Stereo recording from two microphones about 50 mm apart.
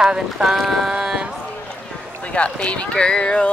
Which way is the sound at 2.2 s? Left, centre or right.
Left.